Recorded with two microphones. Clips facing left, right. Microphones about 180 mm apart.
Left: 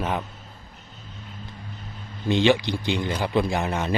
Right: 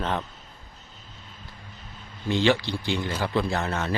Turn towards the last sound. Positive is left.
turn(degrees=15)  # may be behind; listen again after turning